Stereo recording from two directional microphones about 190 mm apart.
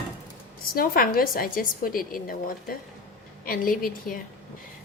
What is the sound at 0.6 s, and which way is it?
A woman's voice, 50° left (ahead or behind).